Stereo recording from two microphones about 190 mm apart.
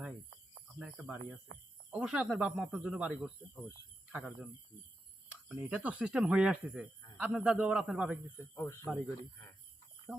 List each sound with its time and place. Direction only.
0.8 s speech: 5° right (ahead or behind)
1.5 s speech: 65° right (ahead or behind)
1.9 s speech: 5° right (ahead or behind)
5.5 s speech: 10° right (ahead or behind)
8.5 s speech: 15° left (ahead or behind)